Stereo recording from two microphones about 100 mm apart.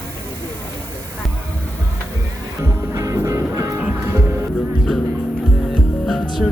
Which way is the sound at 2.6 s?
30° right (ahead or behind).